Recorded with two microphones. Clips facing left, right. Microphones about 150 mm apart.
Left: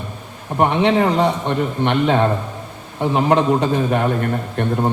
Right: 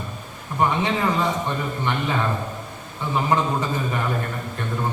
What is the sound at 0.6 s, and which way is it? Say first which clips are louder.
A man's voice: left 6 dB; 70° left (ahead or behind).